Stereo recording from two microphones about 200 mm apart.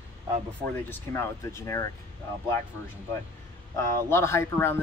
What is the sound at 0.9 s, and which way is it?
Speech, 15° left (ahead or behind).